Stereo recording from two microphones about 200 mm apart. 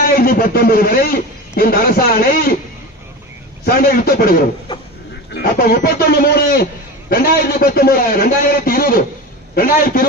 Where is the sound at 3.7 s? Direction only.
50° left (ahead or behind).